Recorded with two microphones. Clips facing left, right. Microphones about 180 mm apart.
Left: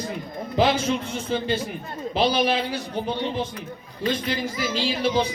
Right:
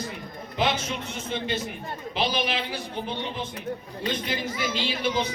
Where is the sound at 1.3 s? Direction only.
35° left (ahead or behind).